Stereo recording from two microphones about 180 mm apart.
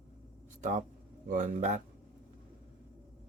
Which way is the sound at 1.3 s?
40° right (ahead or behind).